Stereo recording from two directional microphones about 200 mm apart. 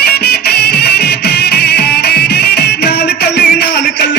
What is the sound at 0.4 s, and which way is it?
Music, 55° left (ahead or behind).